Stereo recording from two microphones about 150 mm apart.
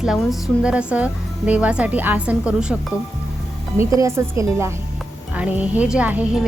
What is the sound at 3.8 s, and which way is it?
A woman's voice, 20° right (ahead or behind).